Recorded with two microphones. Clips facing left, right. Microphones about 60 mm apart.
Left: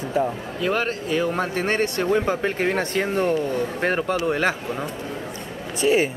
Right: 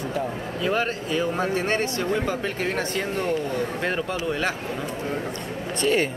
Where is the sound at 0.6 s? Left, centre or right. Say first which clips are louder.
Left 1 dB; left.